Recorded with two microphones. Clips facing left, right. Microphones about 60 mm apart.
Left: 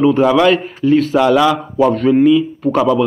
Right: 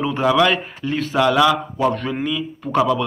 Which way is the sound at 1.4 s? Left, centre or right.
Left.